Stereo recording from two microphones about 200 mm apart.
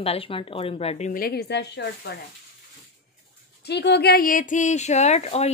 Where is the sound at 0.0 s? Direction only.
30° left (ahead or behind); by 2.1 s 60° left (ahead or behind).